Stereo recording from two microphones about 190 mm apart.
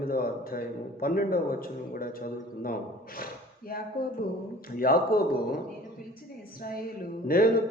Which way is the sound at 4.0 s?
50° left (ahead or behind).